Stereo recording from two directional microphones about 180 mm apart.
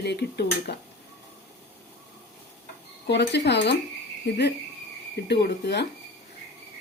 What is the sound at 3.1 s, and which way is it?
Speech, 70° left (ahead or behind).